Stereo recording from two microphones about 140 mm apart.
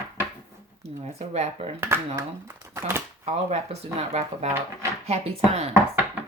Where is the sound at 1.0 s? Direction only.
50° right (ahead or behind).